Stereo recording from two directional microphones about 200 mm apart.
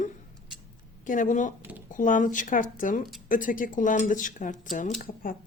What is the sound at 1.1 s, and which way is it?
Speech, 40° left (ahead or behind).